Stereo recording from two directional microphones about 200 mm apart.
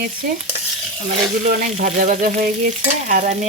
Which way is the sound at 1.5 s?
40° right (ahead or behind).